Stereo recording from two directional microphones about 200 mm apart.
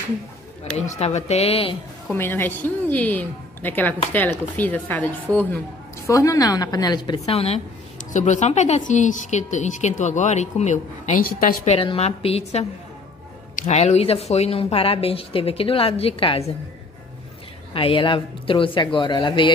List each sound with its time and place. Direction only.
0.7 s a woman's voice: 35° left (ahead or behind)
2.1 s a woman's voice: 10° left (ahead or behind); by 11.7 s 45° left (ahead or behind)
11.7 s a woman's voice: 30° left (ahead or behind)
17.7 s a woman's voice: 25° left (ahead or behind)